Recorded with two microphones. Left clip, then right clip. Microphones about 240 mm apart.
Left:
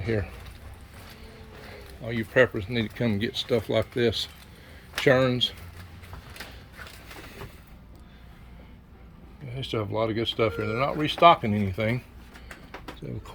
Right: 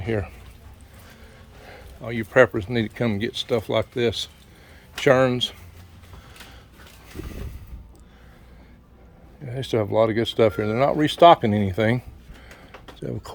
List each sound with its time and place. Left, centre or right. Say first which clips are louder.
0.0 s speech: right 2 dB; centre
1.7 s speech: right 2 dB; centre
9.6 s speech: right 8 dB; right